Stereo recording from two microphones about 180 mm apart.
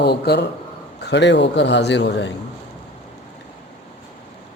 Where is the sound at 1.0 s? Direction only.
75° left (ahead or behind).